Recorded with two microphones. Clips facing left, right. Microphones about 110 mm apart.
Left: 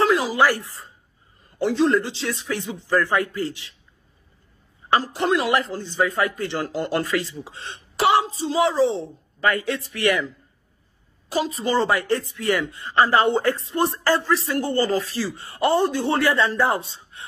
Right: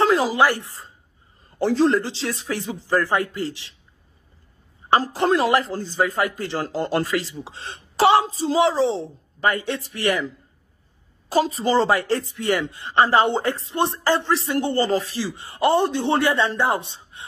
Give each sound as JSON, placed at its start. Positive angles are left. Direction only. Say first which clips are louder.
{"t": 0.0, "sound": "a sound", "louder": "right 1 dB", "side_deg": -35}
{"t": 0.7, "sound": "a woman's voice", "louder": "even", "side_deg": -25}
{"t": 4.8, "sound": "speech", "louder": "right 2 dB", "side_deg": -35}
{"t": 11.2, "sound": "speech", "louder": "right 3 dB", "side_deg": -35}
{"t": 15.1, "sound": "speech", "louder": "even", "side_deg": -15}